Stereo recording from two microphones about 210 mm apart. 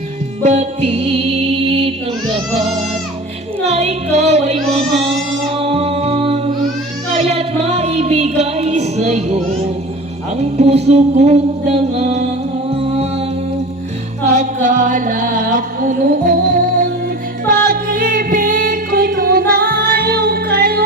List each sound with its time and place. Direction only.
0.4 s music: 35° right (ahead or behind)
3.6 s speech: 30° right (ahead or behind)
5.5 s music: 30° right (ahead or behind)
10.4 s music: 30° right (ahead or behind)
14.3 s music: 35° right (ahead or behind)